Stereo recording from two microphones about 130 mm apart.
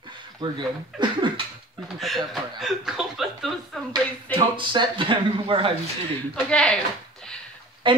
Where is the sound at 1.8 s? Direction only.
Centre (ahead or behind).